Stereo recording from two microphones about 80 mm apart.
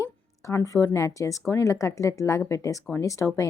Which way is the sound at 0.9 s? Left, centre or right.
Left.